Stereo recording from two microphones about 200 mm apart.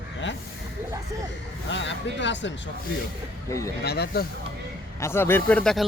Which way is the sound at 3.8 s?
55° left (ahead or behind).